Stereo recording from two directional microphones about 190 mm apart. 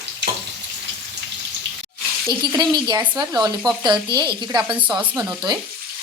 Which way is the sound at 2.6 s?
20° right (ahead or behind).